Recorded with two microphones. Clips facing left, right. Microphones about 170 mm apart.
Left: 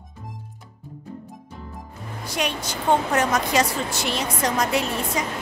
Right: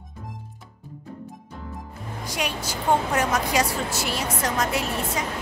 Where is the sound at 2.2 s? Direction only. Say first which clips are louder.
Left 2 dB; 10° right (ahead or behind).